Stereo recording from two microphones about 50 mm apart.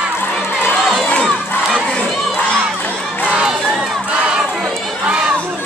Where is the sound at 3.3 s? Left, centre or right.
Centre.